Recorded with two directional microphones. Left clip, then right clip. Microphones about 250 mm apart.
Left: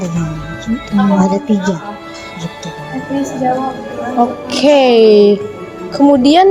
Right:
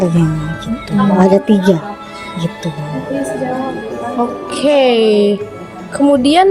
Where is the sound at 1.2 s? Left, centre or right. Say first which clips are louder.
Right 4 dB; right.